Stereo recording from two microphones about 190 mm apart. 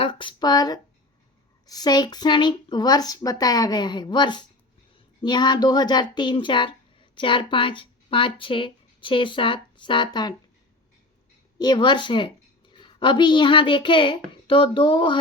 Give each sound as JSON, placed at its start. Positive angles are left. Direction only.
{"t": 0.0, "sound": "speech", "side_deg": 25}
{"t": 11.5, "sound": "a woman's voice", "side_deg": 20}